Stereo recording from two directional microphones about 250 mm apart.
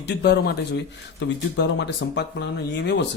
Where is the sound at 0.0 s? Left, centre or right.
Left.